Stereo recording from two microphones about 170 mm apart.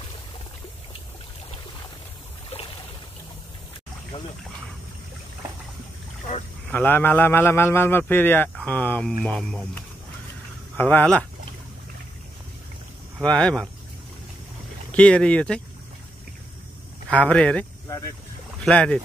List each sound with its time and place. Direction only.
6.7 s a man's voice: 10° left (ahead or behind)
13.2 s speech: 5° left (ahead or behind)
14.9 s a man's voice: 5° left (ahead or behind)
17.1 s a man's voice: 5° left (ahead or behind)
17.8 s speech: 15° left (ahead or behind)
18.6 s speech: 5° left (ahead or behind)